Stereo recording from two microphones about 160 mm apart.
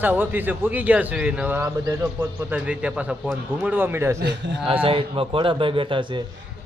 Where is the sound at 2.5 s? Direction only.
5° right (ahead or behind).